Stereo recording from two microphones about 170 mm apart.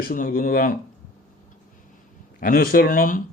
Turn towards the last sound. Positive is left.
turn(degrees=55)  # may be behind; listen again after turning